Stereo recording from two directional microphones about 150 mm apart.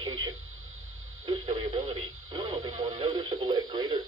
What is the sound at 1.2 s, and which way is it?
Radio, 35° right (ahead or behind).